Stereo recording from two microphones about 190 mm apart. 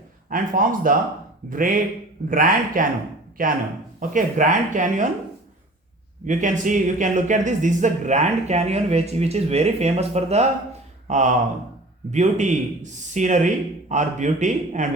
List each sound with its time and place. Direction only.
0.3 s speech: 45° right (ahead or behind)
6.2 s speech: 40° right (ahead or behind)